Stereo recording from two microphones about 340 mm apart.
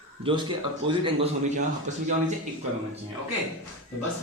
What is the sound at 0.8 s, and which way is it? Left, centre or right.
Speech, centre.